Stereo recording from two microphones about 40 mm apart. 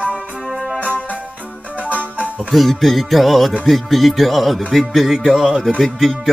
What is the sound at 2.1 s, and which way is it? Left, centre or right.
Music, right.